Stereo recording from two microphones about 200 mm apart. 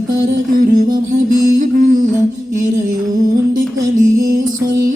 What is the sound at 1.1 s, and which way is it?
Music, 40° right (ahead or behind).